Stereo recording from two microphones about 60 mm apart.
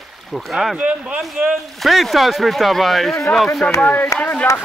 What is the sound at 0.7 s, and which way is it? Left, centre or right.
Speech, centre.